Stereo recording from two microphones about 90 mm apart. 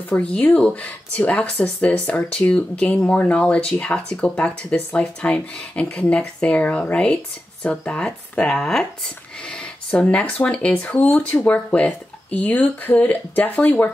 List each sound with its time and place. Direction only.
0.2 s speech: 15° left (ahead or behind)